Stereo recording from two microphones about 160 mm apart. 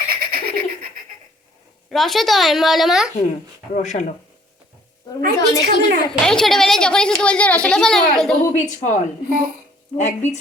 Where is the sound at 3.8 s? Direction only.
50° left (ahead or behind).